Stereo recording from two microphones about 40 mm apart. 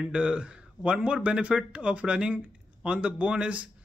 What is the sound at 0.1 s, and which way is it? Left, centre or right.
Speech, right.